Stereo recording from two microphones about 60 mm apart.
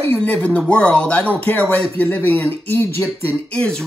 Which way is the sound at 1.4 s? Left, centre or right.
Left.